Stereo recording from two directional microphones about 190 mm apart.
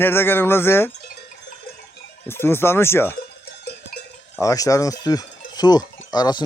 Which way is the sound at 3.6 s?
55° left (ahead or behind).